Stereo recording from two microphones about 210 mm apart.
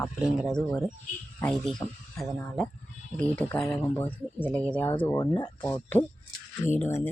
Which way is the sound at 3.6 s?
5° left (ahead or behind).